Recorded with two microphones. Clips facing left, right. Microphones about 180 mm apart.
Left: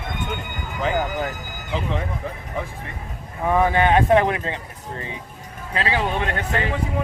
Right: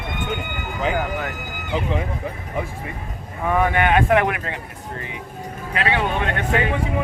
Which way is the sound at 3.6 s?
30° left (ahead or behind).